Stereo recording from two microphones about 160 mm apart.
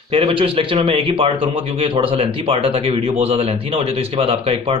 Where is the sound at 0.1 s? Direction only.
35° right (ahead or behind).